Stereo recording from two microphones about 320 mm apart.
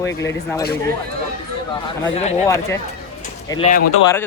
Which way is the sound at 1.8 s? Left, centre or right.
Centre.